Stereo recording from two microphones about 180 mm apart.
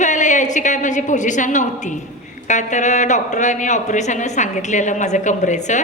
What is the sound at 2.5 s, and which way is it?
Speech, 40° left (ahead or behind).